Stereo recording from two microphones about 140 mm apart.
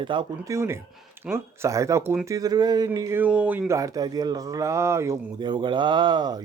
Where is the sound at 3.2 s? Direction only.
10° right (ahead or behind).